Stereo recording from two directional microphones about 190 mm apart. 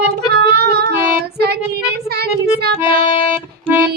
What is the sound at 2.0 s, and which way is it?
Child singing, 55° right (ahead or behind).